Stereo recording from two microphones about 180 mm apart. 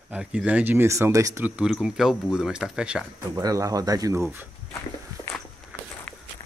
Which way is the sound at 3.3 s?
20° right (ahead or behind).